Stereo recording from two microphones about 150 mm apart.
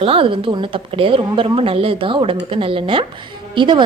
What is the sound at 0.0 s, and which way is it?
A woman's voice, 40° right (ahead or behind).